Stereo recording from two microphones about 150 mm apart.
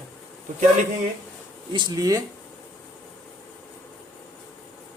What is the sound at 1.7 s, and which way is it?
Speech, 30° right (ahead or behind).